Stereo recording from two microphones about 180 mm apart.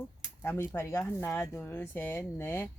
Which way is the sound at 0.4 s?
15° left (ahead or behind).